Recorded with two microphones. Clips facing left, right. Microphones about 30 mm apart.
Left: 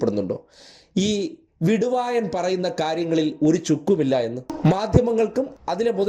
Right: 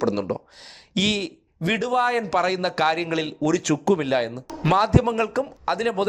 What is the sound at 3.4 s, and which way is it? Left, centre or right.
Speech, right.